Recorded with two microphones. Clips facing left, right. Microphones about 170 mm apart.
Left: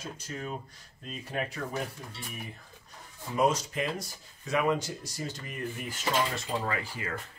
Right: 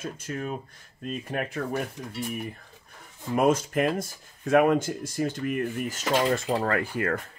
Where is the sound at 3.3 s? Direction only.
55° right (ahead or behind).